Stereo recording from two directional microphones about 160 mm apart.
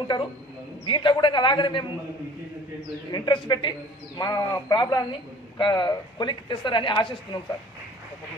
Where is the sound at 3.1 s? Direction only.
30° left (ahead or behind).